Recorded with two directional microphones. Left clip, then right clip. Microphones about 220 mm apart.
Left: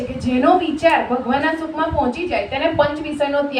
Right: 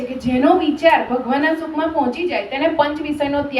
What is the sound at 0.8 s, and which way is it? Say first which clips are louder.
A woman's voice: right 1 dB; 15° right (ahead or behind).